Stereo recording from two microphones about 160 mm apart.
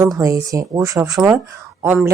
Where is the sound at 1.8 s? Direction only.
10° right (ahead or behind).